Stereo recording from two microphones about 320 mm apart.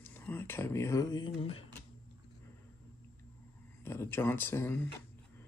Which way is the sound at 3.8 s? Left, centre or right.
Centre.